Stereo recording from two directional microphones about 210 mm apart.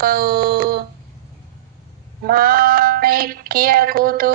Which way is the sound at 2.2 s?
45° right (ahead or behind).